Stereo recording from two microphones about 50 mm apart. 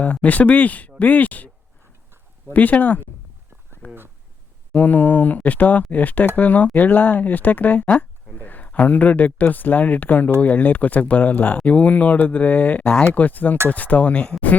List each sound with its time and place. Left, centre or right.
0.0 s speech: left
2.5 s speech: left
3.8 s a sound: left
4.7 s speech: left